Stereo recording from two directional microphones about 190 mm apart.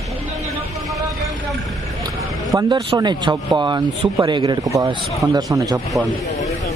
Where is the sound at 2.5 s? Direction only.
20° right (ahead or behind).